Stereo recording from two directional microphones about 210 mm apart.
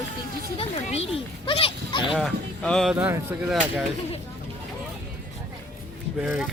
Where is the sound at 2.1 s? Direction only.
Centre (ahead or behind).